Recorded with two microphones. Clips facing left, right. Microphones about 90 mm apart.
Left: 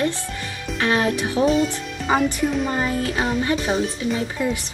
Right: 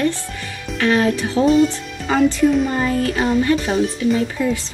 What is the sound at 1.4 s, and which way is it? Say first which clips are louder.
Speech: right 5 dB; centre (ahead or behind).